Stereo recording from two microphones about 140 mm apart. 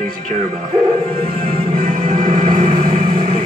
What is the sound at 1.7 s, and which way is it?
Music, 90° right.